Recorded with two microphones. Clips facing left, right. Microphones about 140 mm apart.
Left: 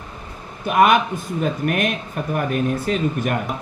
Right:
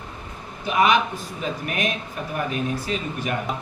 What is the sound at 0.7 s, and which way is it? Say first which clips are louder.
Speech: left 4 dB; 55° left (ahead or behind).